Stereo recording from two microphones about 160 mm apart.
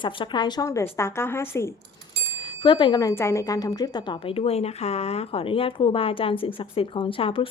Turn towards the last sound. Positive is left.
turn(degrees=35)  # may be behind; listen again after turning